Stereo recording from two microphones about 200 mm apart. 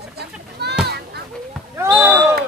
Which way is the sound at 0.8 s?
55° right (ahead or behind).